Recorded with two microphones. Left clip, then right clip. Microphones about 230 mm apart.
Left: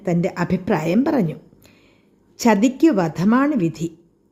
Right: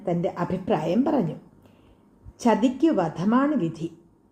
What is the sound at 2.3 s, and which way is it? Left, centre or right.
Speech, left.